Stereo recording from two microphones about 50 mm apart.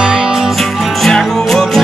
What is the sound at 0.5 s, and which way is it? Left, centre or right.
Music, centre.